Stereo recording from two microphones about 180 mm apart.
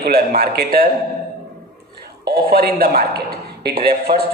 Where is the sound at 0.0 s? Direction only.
60° right (ahead or behind).